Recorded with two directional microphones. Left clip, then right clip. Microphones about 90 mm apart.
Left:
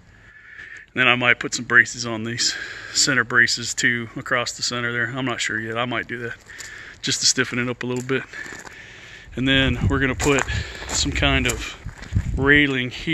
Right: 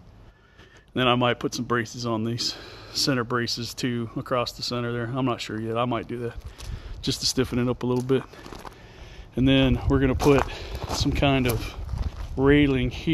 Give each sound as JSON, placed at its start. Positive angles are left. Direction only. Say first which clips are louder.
{"t": 0.9, "sound": "speech", "louder": "left 5 dB", "side_deg": -40}
{"t": 7.0, "sound": "speech", "louder": "left 5 dB", "side_deg": -30}
{"t": 9.3, "sound": "speech", "louder": "left 2 dB", "side_deg": -30}
{"t": 10.1, "sound": "speech", "louder": "even", "side_deg": -10}